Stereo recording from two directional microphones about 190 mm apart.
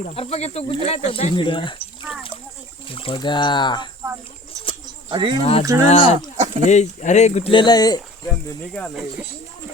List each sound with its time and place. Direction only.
0.2 s speech: 35° left (ahead or behind)
2.9 s speech: 30° left (ahead or behind)
4.9 s bird: 25° right (ahead or behind)
5.4 s speech: 30° left (ahead or behind)
6.3 s a sound: 35° right (ahead or behind)
6.7 s speech: 40° left (ahead or behind); by 8.3 s 20° left (ahead or behind)
8.7 s speech: 5° left (ahead or behind)